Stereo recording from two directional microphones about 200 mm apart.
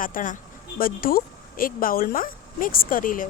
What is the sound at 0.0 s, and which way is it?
Speech, 40° left (ahead or behind).